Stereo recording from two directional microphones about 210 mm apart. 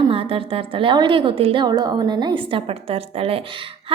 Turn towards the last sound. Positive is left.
turn(degrees=-25)  # may be behind; listen again after turning